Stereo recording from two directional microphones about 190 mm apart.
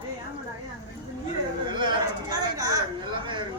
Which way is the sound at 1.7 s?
25° right (ahead or behind).